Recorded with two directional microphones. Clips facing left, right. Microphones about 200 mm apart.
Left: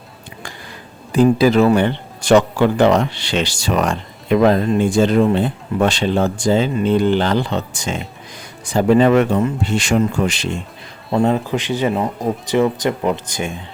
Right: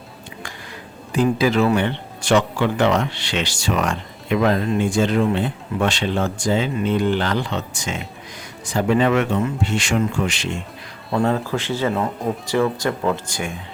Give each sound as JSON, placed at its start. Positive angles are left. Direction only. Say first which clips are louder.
{"t": 1.1, "sound": "a man's voice", "louder": "left 5 dB", "side_deg": 35}
{"t": 11.1, "sound": "speech", "louder": "left 3 dB", "side_deg": 20}